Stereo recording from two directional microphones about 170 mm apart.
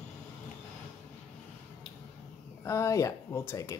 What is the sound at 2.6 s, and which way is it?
Speech, 15° left (ahead or behind).